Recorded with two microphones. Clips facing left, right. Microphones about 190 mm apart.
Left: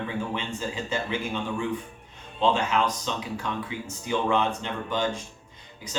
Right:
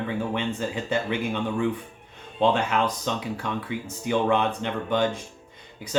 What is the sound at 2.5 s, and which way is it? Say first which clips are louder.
Speech: right 1 dB; 55° right (ahead or behind).